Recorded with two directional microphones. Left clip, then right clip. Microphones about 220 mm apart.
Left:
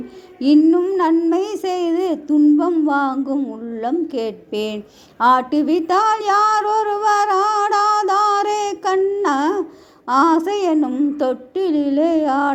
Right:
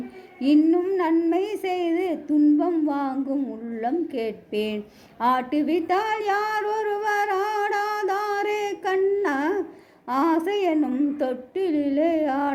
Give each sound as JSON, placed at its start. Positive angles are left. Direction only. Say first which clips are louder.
{"t": 0.3, "sound": "speech", "louder": "left 6 dB", "side_deg": 25}